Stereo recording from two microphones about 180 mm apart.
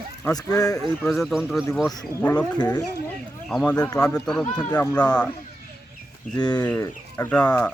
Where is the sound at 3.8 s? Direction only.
20° left (ahead or behind).